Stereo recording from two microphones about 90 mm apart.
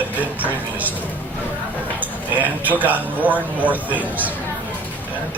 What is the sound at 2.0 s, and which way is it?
Speech, 20° right (ahead or behind).